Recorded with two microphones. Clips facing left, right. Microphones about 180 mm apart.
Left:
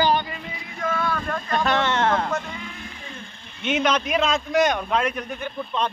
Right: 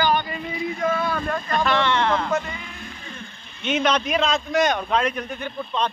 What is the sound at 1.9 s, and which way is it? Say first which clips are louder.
Speech: even; 45° left (ahead or behind).